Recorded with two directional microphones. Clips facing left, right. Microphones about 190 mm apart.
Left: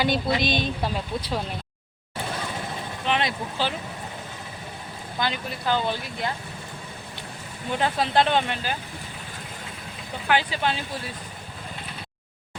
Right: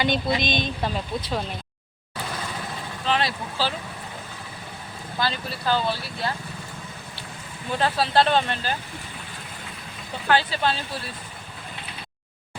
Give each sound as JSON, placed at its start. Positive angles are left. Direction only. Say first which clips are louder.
{"t": 0.0, "sound": "a woman's voice", "louder": "even", "side_deg": 10}
{"t": 3.1, "sound": "speech", "louder": "right 1 dB", "side_deg": 20}
{"t": 5.2, "sound": "a woman's voice", "louder": "right 1 dB", "side_deg": 15}
{"t": 7.8, "sound": "a woman's voice", "louder": "right 1 dB", "side_deg": 15}
{"t": 10.2, "sound": "a woman's voice", "louder": "right 2 dB", "side_deg": 15}